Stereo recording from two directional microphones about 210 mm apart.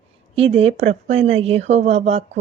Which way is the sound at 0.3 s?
30° right (ahead or behind).